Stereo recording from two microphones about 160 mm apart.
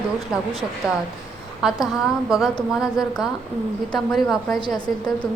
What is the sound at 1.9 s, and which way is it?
A woman's voice, centre (ahead or behind).